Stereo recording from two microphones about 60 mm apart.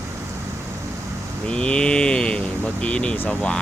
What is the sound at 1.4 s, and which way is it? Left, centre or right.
Speech, centre.